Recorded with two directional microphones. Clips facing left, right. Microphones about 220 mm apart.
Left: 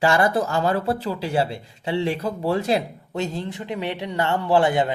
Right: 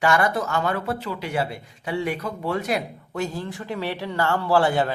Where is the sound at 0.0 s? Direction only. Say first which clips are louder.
Left 2 dB; 30° left (ahead or behind).